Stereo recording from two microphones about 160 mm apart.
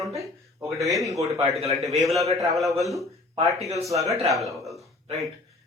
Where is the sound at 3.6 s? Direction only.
20° right (ahead or behind).